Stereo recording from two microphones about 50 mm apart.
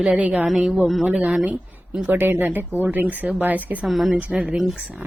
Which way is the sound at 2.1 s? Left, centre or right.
Right.